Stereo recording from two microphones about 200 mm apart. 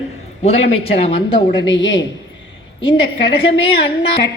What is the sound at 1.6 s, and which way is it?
Speech, 70° left (ahead or behind).